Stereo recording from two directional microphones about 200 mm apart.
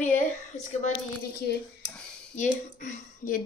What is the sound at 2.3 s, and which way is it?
Speech, 40° left (ahead or behind).